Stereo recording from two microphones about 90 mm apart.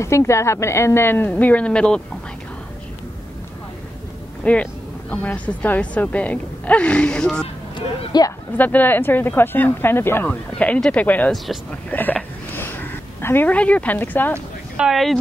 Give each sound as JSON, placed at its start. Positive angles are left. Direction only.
{"t": 0.0, "sound": "speech", "side_deg": 30}
{"t": 4.4, "sound": "a woman's voice", "side_deg": 15}
{"t": 8.1, "sound": "speech", "side_deg": 50}
{"t": 8.5, "sound": "speech", "side_deg": 20}
{"t": 11.9, "sound": "a sound", "side_deg": 20}
{"t": 14.8, "sound": "speech", "side_deg": 0}